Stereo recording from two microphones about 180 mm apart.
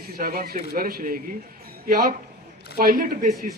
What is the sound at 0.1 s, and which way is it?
A man's voice, 55° right (ahead or behind).